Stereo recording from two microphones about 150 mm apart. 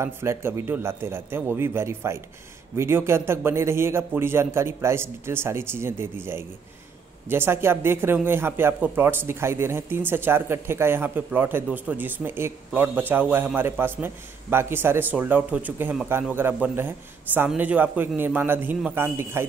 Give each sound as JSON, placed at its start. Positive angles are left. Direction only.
{"t": 0.0, "sound": "speech", "side_deg": -15}